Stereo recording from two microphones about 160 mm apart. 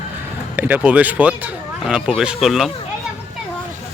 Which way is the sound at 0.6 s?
10° right (ahead or behind).